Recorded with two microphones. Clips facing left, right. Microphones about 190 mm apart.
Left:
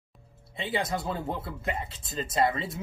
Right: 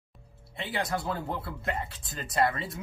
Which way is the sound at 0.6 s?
20° left (ahead or behind).